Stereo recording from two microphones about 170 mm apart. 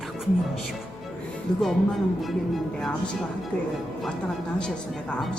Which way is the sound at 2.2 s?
Centre (ahead or behind).